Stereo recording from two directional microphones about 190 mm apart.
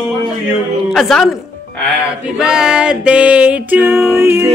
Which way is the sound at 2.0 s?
5° right (ahead or behind).